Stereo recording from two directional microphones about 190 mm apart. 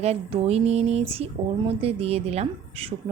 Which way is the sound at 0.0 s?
30° right (ahead or behind).